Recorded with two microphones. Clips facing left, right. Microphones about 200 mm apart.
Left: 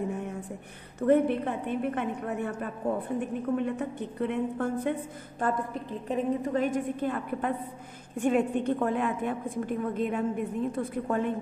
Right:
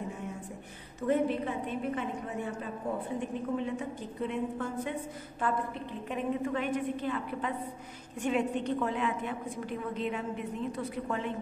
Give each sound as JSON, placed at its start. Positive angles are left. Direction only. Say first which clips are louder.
{"t": 1.0, "sound": "a woman's voice", "louder": "left 5 dB", "side_deg": 55}